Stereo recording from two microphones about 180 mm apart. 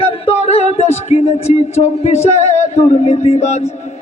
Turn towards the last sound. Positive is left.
turn(degrees=35)  # may be behind; listen again after turning